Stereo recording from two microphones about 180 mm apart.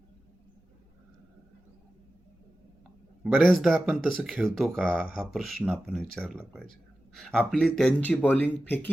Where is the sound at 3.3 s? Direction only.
Centre (ahead or behind).